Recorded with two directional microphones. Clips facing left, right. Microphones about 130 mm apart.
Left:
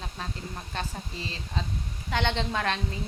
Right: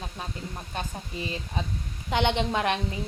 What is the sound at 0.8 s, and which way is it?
A woman's voice, 15° right (ahead or behind).